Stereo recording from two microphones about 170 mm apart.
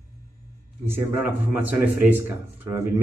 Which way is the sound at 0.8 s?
10° right (ahead or behind).